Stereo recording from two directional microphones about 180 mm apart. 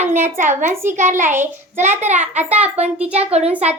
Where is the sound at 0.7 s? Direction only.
15° right (ahead or behind).